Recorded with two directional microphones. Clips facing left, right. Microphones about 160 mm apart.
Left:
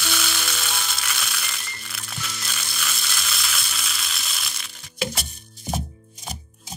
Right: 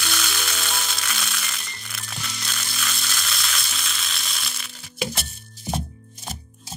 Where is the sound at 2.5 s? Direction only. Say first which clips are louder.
Right 1 dB; centre (ahead or behind).